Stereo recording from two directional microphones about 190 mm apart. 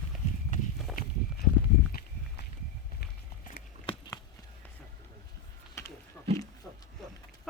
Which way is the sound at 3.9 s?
20° left (ahead or behind).